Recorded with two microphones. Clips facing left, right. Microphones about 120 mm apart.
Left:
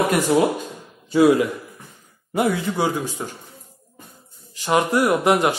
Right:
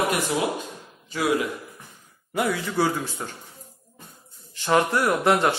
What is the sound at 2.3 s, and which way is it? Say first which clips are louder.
Speech: left 3 dB; 20° left (ahead or behind).